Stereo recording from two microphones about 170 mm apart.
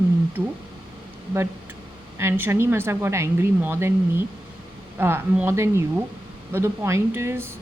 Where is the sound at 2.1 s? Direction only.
15° right (ahead or behind).